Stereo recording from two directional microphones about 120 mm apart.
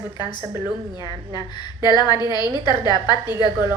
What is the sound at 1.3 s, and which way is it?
A woman's voice, 35° left (ahead or behind).